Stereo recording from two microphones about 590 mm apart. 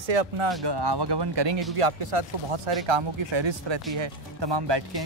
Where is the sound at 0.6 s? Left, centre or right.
Right.